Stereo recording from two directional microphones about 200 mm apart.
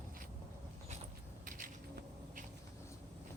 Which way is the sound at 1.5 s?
45° right (ahead or behind).